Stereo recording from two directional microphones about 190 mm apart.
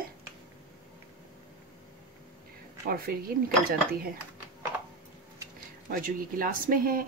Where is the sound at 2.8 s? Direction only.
50° right (ahead or behind).